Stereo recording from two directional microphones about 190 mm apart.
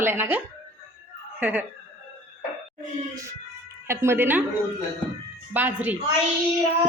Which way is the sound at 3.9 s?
15° right (ahead or behind).